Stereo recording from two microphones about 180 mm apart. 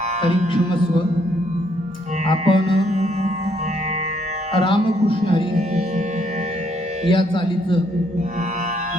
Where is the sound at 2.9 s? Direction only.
40° right (ahead or behind).